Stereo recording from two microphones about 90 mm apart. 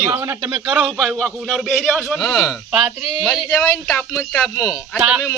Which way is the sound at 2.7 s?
10° right (ahead or behind).